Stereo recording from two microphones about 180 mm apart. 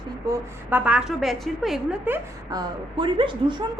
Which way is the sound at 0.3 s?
10° right (ahead or behind).